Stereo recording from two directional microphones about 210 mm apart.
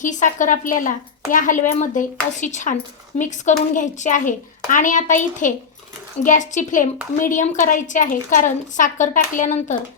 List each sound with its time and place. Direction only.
0.0 s a woman's voice: 35° left (ahead or behind)